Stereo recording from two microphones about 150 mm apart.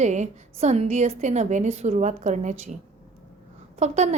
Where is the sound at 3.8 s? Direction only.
50° right (ahead or behind).